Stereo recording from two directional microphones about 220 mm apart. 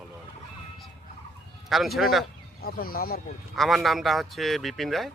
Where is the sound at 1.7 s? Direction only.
Centre (ahead or behind).